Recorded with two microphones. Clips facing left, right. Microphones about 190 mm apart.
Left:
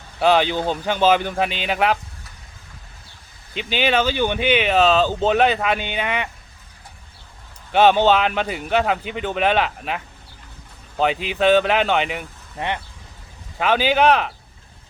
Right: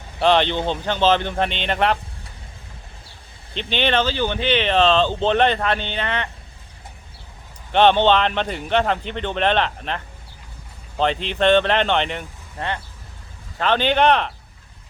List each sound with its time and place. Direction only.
0.2 s speech: 5° left (ahead or behind)
3.5 s speech: 5° left (ahead or behind)
7.7 s speech: 5° left (ahead or behind)